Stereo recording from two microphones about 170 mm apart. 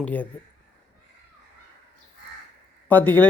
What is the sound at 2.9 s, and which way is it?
Speech, 10° left (ahead or behind).